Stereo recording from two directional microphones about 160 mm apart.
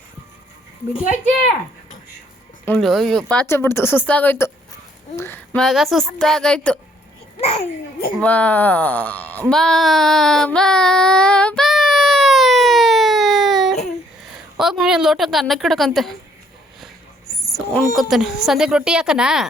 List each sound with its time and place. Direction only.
2.6 s speech: 5° left (ahead or behind)
5.1 s a sound: 15° left (ahead or behind)
5.6 s a woman's voice: centre (ahead or behind)
7.4 s a child's voice: 40° left (ahead or behind)
8.2 s a sound: 10° left (ahead or behind)
14.6 s a woman's voice: 5° right (ahead or behind)
17.4 s a woman's voice: centre (ahead or behind)